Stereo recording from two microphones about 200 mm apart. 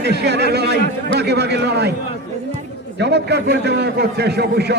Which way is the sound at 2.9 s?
55° right (ahead or behind).